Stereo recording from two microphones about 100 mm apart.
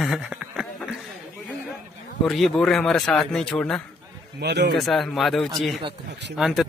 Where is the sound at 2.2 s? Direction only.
5° left (ahead or behind).